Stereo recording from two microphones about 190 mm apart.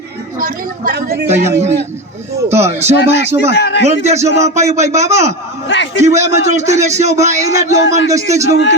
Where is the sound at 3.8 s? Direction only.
35° right (ahead or behind).